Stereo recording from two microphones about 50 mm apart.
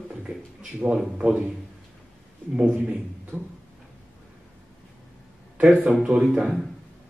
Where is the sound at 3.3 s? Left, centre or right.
Right.